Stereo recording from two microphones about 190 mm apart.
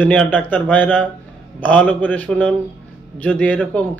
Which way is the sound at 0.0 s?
5° left (ahead or behind).